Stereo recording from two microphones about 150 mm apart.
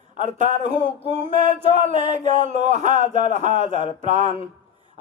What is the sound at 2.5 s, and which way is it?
Speech, 50° right (ahead or behind).